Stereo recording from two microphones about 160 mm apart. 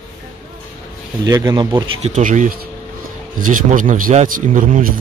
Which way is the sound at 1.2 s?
25° right (ahead or behind).